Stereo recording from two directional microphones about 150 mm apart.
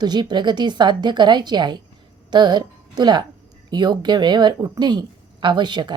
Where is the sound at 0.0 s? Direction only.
30° right (ahead or behind).